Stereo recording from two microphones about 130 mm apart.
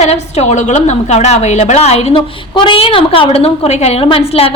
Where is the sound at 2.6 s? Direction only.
40° left (ahead or behind).